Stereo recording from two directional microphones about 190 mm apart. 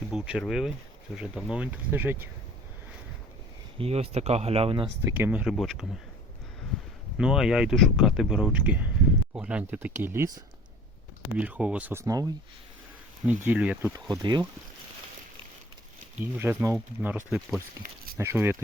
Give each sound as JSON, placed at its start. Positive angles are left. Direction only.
{"t": 0.1, "sound": "speech", "side_deg": -5}
{"t": 3.8, "sound": "speech", "side_deg": -35}
{"t": 5.0, "sound": "speech", "side_deg": -10}
{"t": 7.2, "sound": "speech", "side_deg": -5}
{"t": 14.2, "sound": "speech", "side_deg": -20}
{"t": 16.3, "sound": "speech", "side_deg": -10}